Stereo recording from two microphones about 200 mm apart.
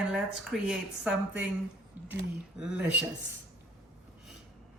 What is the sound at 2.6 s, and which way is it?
Speech, 5° right (ahead or behind).